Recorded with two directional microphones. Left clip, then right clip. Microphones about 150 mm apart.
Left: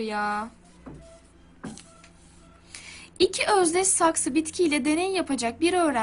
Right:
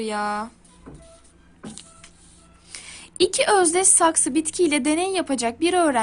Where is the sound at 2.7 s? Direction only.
30° right (ahead or behind).